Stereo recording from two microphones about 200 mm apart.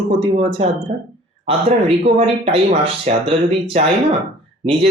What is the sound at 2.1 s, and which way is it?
Speech, 35° right (ahead or behind).